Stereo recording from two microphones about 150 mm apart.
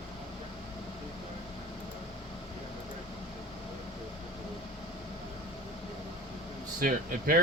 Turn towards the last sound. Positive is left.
turn(degrees=-70)  # may be behind; listen again after turning